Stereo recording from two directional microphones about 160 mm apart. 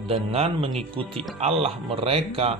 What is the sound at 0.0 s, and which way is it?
Speech, 35° right (ahead or behind).